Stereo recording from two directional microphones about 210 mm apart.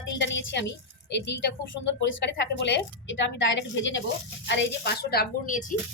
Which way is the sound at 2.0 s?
55° left (ahead or behind).